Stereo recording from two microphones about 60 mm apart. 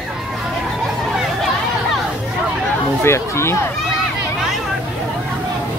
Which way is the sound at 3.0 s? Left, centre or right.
Left.